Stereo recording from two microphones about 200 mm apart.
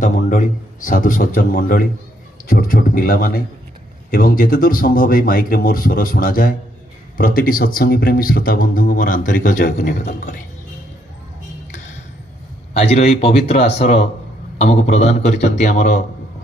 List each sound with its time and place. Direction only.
0.0 s a man's voice: 40° left (ahead or behind)
12.7 s a man's voice: 30° left (ahead or behind)